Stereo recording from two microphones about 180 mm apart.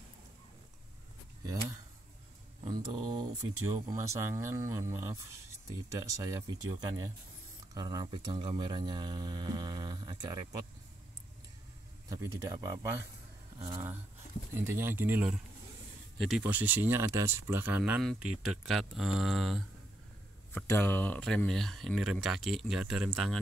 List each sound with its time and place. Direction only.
1.4 s speech: 20° right (ahead or behind)
12.1 s speech: 15° right (ahead or behind)
14.5 s speech: 15° right (ahead or behind)
20.5 s speech: 10° left (ahead or behind)